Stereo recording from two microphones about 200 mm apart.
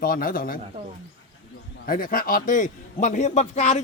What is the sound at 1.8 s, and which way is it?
A man's voice, 45° left (ahead or behind).